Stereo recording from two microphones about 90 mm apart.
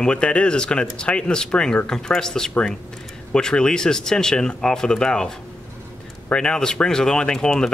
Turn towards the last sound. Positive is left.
turn(degrees=5)  # may be behind; listen again after turning